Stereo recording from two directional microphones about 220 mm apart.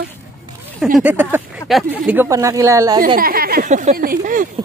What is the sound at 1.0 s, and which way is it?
Speech, 10° right (ahead or behind).